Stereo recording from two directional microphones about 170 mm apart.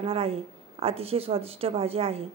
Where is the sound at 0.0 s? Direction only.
35° right (ahead or behind).